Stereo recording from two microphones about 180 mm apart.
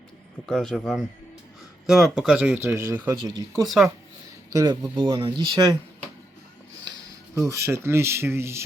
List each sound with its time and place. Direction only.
0.4 s speech: 5° left (ahead or behind)
3.2 s speech: 20° right (ahead or behind)
7.4 s speech: 15° right (ahead or behind)